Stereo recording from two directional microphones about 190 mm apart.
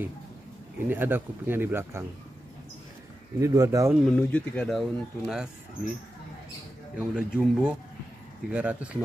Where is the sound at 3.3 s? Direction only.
15° right (ahead or behind).